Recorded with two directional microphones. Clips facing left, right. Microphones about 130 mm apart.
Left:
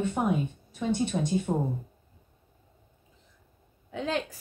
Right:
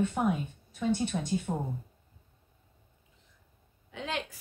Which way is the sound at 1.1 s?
20° left (ahead or behind).